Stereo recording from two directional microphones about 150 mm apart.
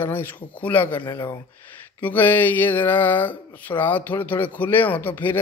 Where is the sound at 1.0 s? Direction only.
30° left (ahead or behind).